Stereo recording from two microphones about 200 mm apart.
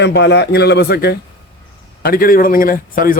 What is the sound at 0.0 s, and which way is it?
A man's voice, 60° left (ahead or behind).